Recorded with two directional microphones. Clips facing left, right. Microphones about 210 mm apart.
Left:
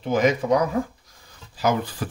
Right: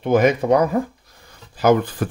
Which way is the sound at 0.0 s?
60° right (ahead or behind).